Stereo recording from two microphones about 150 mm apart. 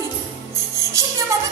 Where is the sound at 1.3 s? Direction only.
20° right (ahead or behind).